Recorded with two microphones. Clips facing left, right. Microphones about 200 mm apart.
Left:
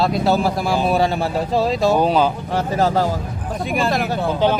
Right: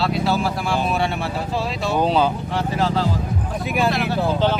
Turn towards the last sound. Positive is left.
turn(degrees=45)  # may be behind; listen again after turning